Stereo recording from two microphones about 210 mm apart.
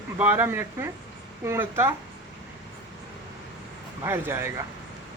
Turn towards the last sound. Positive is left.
turn(degrees=-10)  # may be behind; listen again after turning